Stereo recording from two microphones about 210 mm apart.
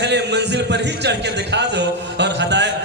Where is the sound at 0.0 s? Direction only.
55° right (ahead or behind).